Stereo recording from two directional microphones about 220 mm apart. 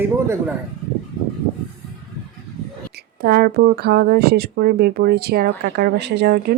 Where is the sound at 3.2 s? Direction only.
45° right (ahead or behind).